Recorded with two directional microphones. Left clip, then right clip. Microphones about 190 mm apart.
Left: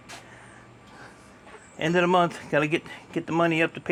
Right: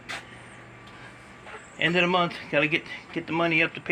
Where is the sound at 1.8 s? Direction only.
40° left (ahead or behind).